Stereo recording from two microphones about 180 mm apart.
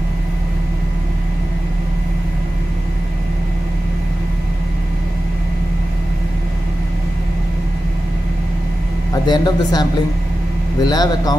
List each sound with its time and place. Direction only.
9.1 s a man's voice: 20° left (ahead or behind)